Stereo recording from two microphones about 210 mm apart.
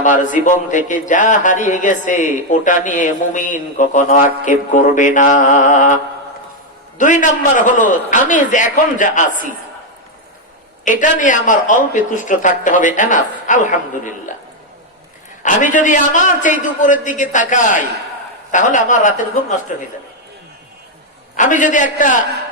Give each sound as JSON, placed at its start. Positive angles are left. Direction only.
{"t": 0.0, "sound": "a man's voice", "side_deg": 35}
{"t": 7.0, "sound": "a man's voice", "side_deg": 35}
{"t": 11.0, "sound": "a man's voice", "side_deg": 35}
{"t": 15.4, "sound": "a man's voice", "side_deg": 35}
{"t": 21.3, "sound": "a man's voice", "side_deg": 35}